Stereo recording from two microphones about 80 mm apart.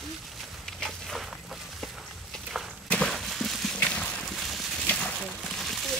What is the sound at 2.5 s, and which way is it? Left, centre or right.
Walk, centre.